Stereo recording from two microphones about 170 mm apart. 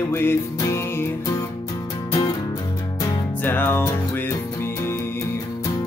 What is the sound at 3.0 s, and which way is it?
Music, 10° left (ahead or behind).